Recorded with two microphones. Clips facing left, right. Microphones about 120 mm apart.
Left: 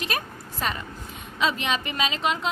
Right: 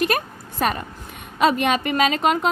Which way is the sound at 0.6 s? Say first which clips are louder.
Right 7 dB; 60° right (ahead or behind).